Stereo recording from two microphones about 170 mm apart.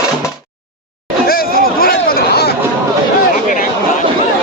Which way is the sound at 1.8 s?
65° left (ahead or behind).